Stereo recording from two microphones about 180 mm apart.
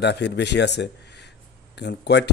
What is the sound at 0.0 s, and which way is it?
Speech, 70° left (ahead or behind).